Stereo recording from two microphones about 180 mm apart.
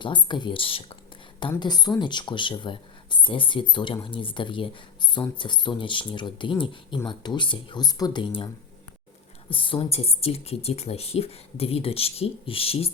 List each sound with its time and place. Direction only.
0.0 s speech: 25° left (ahead or behind)
9.5 s speech: 30° left (ahead or behind)